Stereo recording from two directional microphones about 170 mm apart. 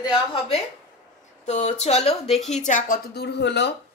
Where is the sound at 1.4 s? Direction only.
40° left (ahead or behind).